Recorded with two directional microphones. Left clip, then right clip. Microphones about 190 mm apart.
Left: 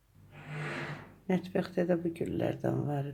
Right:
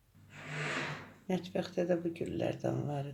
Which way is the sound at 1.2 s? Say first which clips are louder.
Left 4 dB; 15° left (ahead or behind).